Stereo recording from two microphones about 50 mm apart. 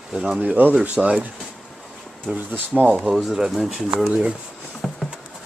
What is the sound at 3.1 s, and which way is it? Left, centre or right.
Speech, centre.